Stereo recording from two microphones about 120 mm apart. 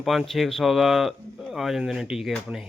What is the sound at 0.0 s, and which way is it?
Speech, centre (ahead or behind).